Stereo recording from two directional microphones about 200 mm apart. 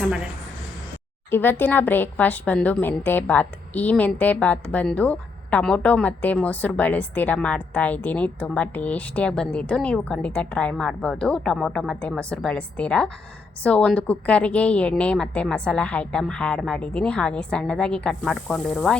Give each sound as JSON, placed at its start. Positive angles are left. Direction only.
{"t": 1.3, "sound": "a woman's voice", "side_deg": 10}